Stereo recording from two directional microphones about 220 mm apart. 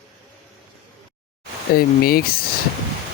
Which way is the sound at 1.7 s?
45° left (ahead or behind).